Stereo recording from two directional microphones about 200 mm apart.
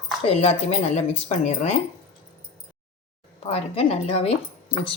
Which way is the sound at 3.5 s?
30° left (ahead or behind).